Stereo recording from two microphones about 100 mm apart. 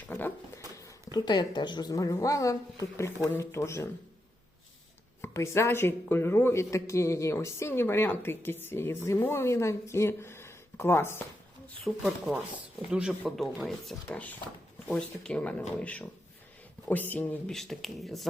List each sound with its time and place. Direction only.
0.1 s dog: 20° left (ahead or behind)
0.8 s speech: 35° left (ahead or behind)
5.2 s a man's voice: 25° left (ahead or behind)
12.0 s speech: 5° right (ahead or behind); by 17.2 s 15° left (ahead or behind)
17.4 s speech: 5° left (ahead or behind)